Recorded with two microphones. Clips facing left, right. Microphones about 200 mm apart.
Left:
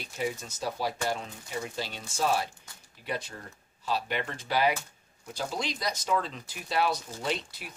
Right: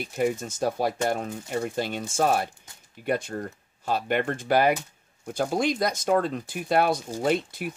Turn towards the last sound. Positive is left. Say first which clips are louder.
# right 9 dB
turn(degrees=-50)  # may be behind; listen again after turning